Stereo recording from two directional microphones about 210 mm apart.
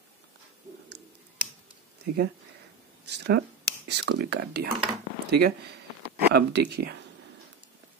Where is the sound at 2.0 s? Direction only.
50° right (ahead or behind).